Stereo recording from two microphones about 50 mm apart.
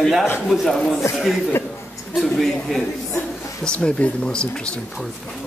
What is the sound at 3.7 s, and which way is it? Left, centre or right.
Speech, left.